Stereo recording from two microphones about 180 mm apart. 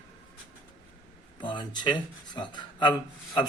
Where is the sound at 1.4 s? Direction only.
25° left (ahead or behind).